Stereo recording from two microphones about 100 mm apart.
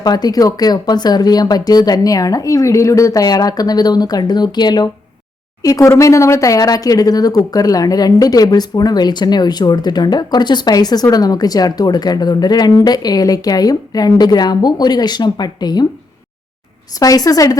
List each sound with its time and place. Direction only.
0.0 s speech: 40° left (ahead or behind)
17.0 s speech: 35° left (ahead or behind)